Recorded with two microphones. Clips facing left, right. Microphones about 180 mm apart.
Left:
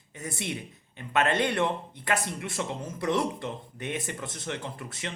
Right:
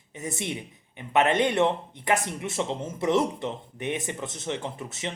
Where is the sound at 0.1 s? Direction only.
20° right (ahead or behind).